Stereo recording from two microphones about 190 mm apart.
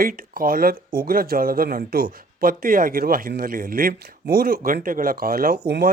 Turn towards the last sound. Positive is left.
turn(degrees=-55)  # may be behind; listen again after turning